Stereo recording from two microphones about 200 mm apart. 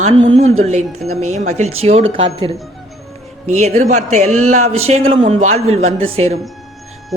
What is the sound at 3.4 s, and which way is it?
Speech, 35° right (ahead or behind).